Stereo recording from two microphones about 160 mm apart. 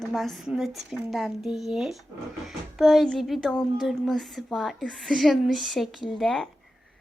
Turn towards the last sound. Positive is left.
turn(degrees=0)  # may be behind; listen again after turning